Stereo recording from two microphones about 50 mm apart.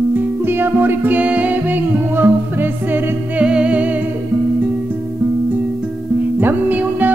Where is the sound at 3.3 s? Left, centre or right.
Right.